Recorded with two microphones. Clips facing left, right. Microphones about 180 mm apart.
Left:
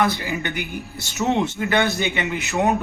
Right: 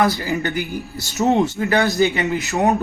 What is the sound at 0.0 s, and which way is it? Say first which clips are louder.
A man's voice: right 3 dB; 40° right (ahead or behind).